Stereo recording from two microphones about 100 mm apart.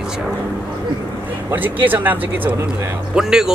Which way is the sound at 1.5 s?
20° right (ahead or behind).